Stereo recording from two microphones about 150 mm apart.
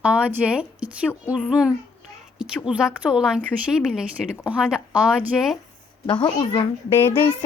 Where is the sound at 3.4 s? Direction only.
10° left (ahead or behind).